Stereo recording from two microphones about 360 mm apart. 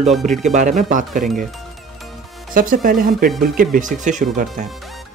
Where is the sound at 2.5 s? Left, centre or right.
Right.